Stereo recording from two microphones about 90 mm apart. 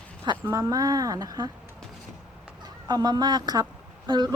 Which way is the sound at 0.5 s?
45° right (ahead or behind).